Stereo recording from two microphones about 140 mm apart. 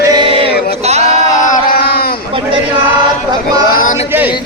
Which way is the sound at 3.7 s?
70° left (ahead or behind).